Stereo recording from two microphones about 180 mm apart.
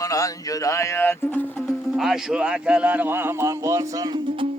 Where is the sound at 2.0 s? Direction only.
5° right (ahead or behind).